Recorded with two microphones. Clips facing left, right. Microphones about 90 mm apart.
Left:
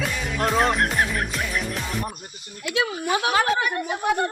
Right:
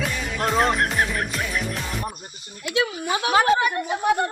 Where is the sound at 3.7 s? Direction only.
Centre (ahead or behind).